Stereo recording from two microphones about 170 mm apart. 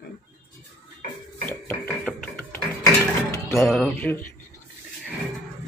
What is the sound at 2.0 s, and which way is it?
Music, 10° left (ahead or behind).